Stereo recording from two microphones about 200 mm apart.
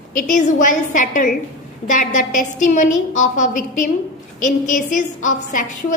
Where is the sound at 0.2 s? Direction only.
40° left (ahead or behind).